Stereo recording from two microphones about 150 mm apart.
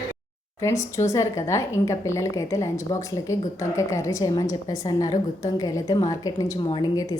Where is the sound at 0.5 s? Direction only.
20° left (ahead or behind).